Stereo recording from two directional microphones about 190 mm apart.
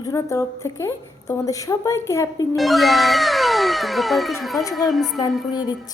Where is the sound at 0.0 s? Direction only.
15° left (ahead or behind).